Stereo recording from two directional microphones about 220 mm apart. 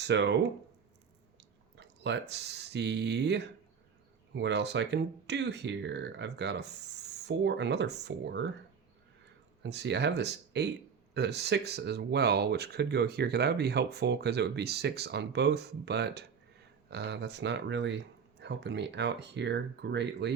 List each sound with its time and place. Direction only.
0.0 s speech: 50° right (ahead or behind)
1.4 s speech: 50° right (ahead or behind)
9.6 s speech: 50° right (ahead or behind)